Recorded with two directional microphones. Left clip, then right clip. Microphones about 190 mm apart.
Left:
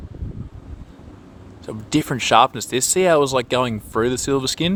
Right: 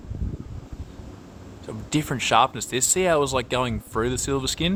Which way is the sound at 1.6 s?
35° left (ahead or behind).